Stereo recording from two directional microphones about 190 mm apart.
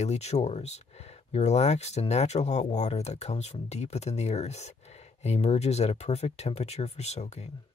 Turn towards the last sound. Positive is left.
turn(degrees=35)  # may be behind; listen again after turning